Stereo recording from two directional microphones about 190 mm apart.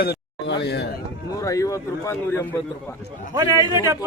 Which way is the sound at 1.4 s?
15° left (ahead or behind).